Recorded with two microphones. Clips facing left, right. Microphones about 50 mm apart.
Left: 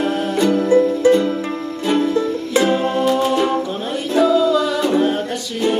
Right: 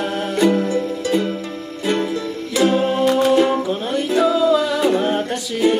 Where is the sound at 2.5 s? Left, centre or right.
Centre.